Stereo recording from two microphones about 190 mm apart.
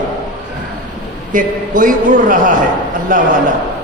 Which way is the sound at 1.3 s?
45° right (ahead or behind).